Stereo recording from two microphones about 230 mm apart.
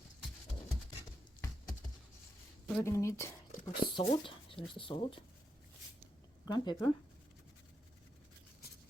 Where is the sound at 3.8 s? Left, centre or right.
Left.